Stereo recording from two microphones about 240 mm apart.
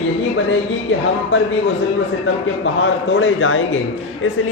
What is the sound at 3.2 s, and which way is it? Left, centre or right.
Speech, left.